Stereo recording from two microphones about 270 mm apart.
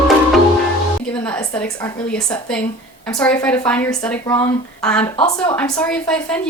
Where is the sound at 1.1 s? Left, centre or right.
Centre.